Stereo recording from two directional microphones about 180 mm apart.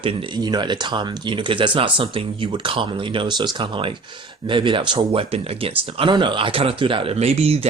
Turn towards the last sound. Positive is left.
turn(degrees=-35)  # may be behind; listen again after turning